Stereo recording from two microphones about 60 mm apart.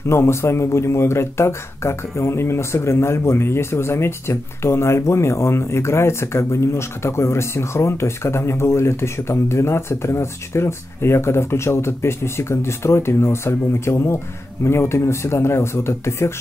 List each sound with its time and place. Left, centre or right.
0.1 s speech: left